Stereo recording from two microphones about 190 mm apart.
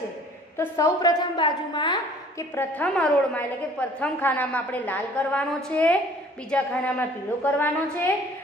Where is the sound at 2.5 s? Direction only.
10° left (ahead or behind).